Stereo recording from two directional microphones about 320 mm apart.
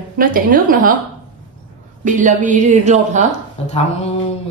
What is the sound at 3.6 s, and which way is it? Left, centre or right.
Speech, centre.